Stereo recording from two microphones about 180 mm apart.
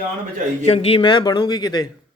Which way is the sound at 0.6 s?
35° left (ahead or behind).